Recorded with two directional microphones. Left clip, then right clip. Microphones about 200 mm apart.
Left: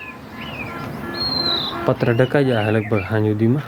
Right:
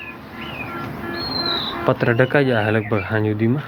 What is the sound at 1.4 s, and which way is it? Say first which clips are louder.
Bird: left 1 dB; 50° left (ahead or behind).